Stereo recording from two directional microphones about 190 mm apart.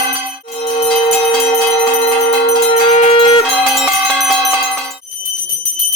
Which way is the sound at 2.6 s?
35° left (ahead or behind).